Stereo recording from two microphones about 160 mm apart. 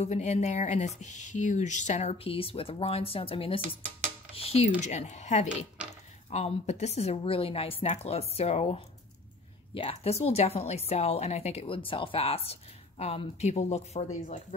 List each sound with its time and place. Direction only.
0.0 s a woman's voice: 45° left (ahead or behind)